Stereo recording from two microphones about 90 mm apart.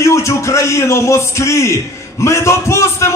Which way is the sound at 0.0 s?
35° left (ahead or behind).